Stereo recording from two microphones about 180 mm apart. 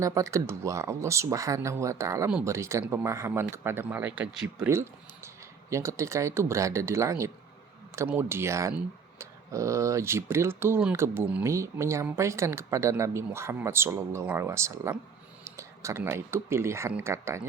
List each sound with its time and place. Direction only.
0.0 s speech: 15° right (ahead or behind)